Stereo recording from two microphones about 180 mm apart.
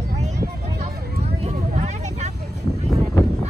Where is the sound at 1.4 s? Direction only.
40° right (ahead or behind).